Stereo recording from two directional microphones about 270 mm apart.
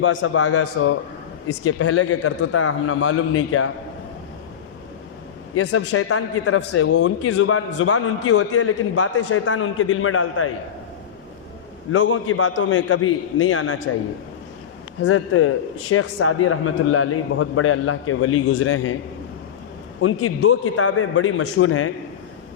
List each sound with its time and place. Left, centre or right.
0.0 s a man's voice: left
5.5 s a man's voice: left
11.9 s a man's voice: left
15.0 s a man's voice: left
20.0 s a man's voice: left